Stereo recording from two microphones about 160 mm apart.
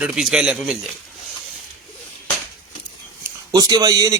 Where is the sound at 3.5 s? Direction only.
25° right (ahead or behind).